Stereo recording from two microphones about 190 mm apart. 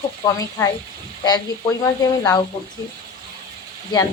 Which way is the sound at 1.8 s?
20° left (ahead or behind).